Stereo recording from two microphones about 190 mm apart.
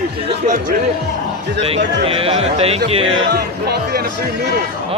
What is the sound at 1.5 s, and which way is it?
Speech, 30° right (ahead or behind).